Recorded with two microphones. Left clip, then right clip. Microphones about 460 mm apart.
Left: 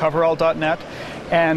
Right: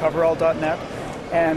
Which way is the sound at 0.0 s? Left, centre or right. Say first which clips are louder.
Left 1 dB; left.